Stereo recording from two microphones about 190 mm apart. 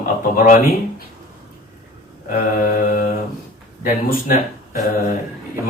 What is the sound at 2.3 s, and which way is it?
Speech, 50° left (ahead or behind).